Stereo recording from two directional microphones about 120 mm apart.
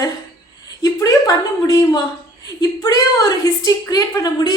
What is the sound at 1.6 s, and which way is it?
A woman's voice, 30° left (ahead or behind).